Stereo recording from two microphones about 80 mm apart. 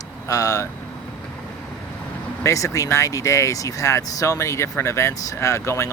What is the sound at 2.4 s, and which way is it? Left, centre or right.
Speech, left.